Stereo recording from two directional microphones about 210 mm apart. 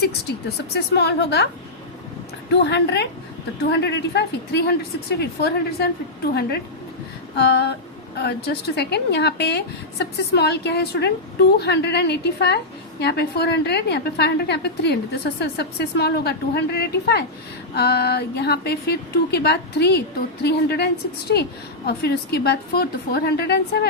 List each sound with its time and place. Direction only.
0.0 s a woman's voice: 50° left (ahead or behind)
2.5 s a woman's voice: 55° left (ahead or behind)
7.3 s a woman's voice: 50° left (ahead or behind)